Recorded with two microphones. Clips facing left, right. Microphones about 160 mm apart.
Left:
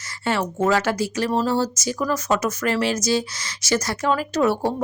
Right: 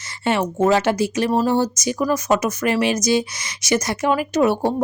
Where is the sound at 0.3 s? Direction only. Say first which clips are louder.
Right 3 dB; 20° right (ahead or behind).